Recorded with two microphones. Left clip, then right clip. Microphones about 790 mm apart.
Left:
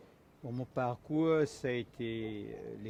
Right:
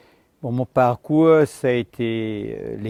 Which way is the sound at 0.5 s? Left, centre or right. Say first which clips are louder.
Right 18 dB; right.